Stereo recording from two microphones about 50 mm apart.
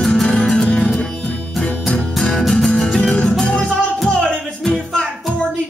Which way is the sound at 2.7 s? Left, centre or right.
Centre.